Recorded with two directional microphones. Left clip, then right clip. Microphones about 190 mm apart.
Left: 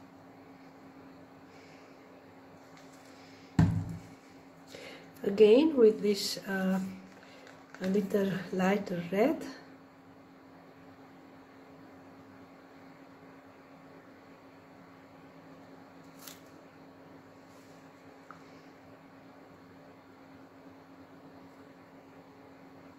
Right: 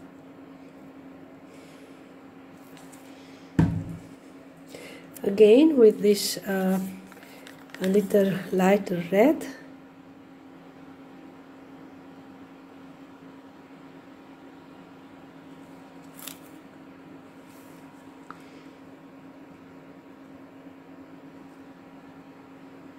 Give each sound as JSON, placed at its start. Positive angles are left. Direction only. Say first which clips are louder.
{"t": 4.8, "sound": "speech", "louder": "right 6 dB", "side_deg": -10}
{"t": 7.8, "sound": "speech", "louder": "right 9 dB", "side_deg": -25}